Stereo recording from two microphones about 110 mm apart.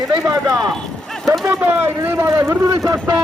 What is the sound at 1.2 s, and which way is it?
Speech, centre (ahead or behind).